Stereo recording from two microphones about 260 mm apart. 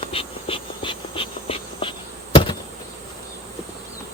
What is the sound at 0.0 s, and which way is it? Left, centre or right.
Insect, left.